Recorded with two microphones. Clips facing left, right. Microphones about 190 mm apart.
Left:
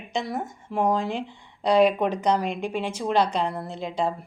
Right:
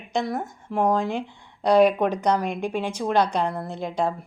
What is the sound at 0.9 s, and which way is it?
Speech, 45° right (ahead or behind).